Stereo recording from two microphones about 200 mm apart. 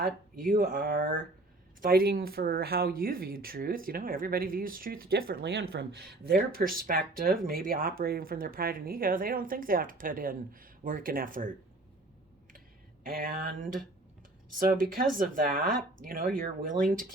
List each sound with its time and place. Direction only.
0.0 s speech: 45° right (ahead or behind)
13.1 s speech: 45° right (ahead or behind)